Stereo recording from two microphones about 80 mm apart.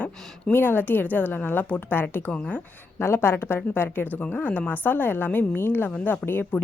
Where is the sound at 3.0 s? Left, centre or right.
Left.